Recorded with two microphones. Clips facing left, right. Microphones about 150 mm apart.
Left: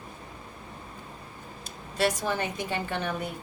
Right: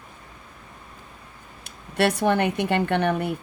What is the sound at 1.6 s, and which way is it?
Speech, 65° right (ahead or behind).